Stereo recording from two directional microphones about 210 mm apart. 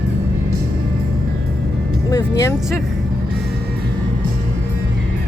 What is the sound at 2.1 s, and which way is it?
Speech, 15° left (ahead or behind).